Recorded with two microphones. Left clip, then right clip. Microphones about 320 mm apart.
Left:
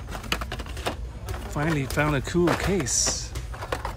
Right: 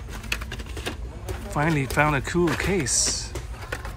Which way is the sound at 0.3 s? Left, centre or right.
Left.